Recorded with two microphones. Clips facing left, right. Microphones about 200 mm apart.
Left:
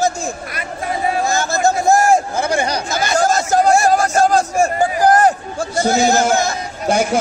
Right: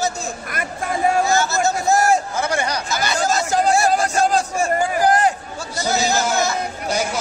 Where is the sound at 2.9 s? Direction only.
45° left (ahead or behind).